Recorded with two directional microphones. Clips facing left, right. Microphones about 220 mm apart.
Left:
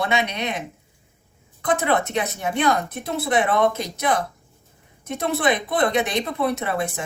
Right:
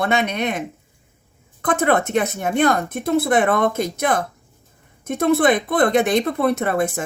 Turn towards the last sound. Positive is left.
turn(degrees=-50)  # may be behind; listen again after turning